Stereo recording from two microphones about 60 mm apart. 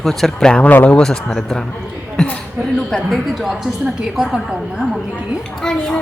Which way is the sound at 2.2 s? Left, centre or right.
Centre.